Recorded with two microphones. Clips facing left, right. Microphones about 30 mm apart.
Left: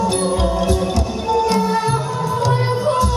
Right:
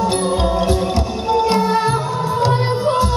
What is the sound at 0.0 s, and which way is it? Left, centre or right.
Music, right.